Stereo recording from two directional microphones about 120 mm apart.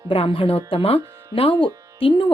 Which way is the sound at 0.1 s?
50° left (ahead or behind).